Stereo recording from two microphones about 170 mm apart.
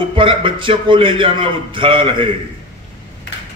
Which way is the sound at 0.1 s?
30° right (ahead or behind).